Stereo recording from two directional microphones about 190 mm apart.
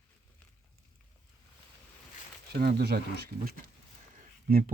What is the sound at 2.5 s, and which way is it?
Speech, 55° right (ahead or behind).